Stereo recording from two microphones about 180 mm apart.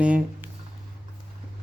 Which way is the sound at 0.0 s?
5° right (ahead or behind).